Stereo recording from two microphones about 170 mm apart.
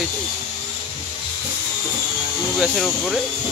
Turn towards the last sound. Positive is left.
turn(degrees=0)  # may be behind; listen again after turning